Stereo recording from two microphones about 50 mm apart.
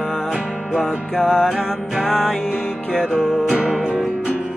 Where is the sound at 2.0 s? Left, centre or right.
Centre.